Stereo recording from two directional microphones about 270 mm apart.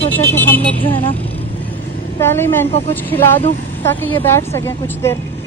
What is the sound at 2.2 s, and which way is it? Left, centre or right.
Speech, centre.